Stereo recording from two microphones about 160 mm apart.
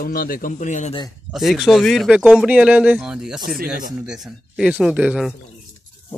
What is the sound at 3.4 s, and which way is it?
Speech, 65° right (ahead or behind).